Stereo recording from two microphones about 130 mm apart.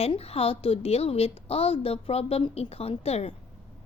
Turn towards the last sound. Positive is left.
turn(degrees=55)  # may be behind; listen again after turning